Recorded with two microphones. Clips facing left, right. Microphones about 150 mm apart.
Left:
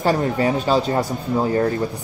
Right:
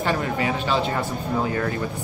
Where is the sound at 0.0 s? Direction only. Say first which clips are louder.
Left 5 dB; 40° left (ahead or behind).